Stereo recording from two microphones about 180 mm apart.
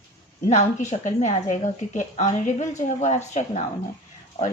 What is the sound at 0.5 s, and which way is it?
A woman's voice, 40° left (ahead or behind).